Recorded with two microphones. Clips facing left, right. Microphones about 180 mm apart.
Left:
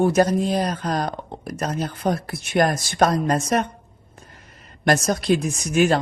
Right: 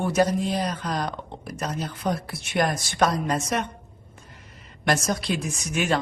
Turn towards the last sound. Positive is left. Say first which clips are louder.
# left 7 dB
turn(degrees=40)  # may be behind; listen again after turning